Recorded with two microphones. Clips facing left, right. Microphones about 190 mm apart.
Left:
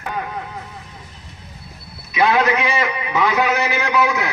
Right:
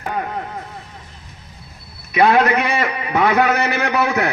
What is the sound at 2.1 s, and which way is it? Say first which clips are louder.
A man's voice: right 3 dB; 55° right (ahead or behind).